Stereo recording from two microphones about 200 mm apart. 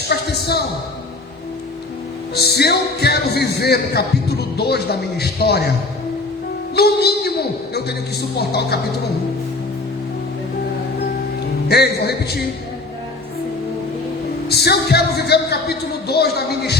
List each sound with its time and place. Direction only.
0.1 s a sound: 55° left (ahead or behind)
2.3 s speech: 55° left (ahead or behind)
6.7 s a woman's voice: 50° left (ahead or behind)
11.7 s speech: 50° left (ahead or behind)
14.4 s speech: 55° left (ahead or behind)